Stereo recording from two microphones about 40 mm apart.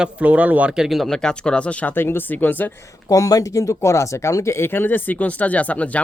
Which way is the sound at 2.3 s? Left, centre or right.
Left.